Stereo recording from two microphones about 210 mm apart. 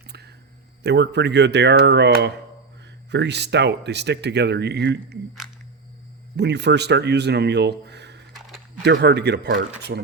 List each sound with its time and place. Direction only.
0.1 s a sound: 50° right (ahead or behind)
0.8 s speech: 55° right (ahead or behind)
6.3 s speech: 55° right (ahead or behind)